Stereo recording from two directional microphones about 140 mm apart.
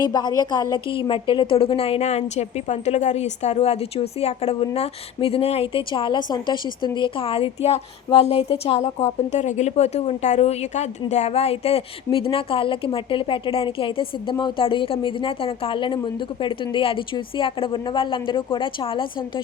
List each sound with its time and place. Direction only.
0.0 s a woman's voice: 30° left (ahead or behind)